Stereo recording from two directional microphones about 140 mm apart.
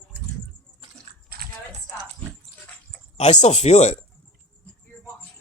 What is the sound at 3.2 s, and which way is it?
Speech, 55° left (ahead or behind).